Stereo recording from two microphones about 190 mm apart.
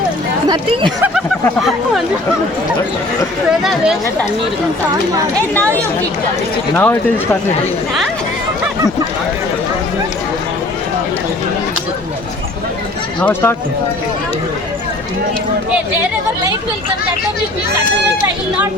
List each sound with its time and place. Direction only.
0.4 s speech: 25° right (ahead or behind)
3.6 s speech: centre (ahead or behind)
6.7 s speech: 10° left (ahead or behind)
13.1 s speech: 10° left (ahead or behind)